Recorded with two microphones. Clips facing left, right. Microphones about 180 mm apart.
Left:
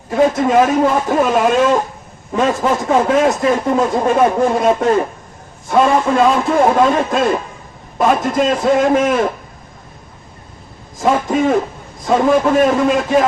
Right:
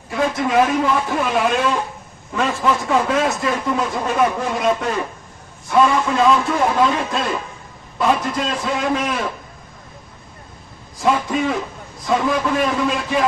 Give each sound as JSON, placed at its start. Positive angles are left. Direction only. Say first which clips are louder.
{"t": 0.3, "sound": "speech", "louder": "even", "side_deg": 45}
{"t": 11.0, "sound": "a sound", "louder": "left 4 dB", "side_deg": 45}
{"t": 12.0, "sound": "speech", "louder": "left 6 dB", "side_deg": 45}